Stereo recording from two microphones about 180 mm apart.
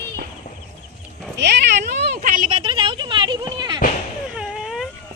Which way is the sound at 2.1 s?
50° right (ahead or behind).